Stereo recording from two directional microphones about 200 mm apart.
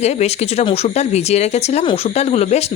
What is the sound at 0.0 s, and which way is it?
Speech, 35° left (ahead or behind).